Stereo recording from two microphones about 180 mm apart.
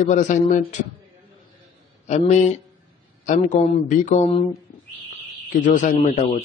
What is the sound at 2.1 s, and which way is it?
A man's voice, 40° left (ahead or behind).